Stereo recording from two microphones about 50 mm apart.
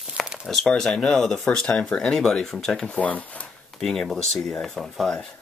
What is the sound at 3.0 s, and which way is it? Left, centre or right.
Speech, left.